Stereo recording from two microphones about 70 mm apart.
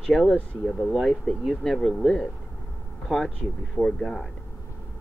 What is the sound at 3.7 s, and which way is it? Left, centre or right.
Speech, centre.